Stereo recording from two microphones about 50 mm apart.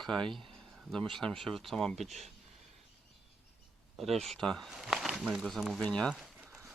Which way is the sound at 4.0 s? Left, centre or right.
Centre.